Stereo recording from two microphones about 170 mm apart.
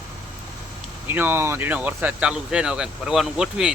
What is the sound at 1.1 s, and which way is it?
Speech, 15° right (ahead or behind).